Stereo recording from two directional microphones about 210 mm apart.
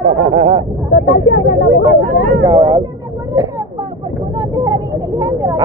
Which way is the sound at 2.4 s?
20° right (ahead or behind).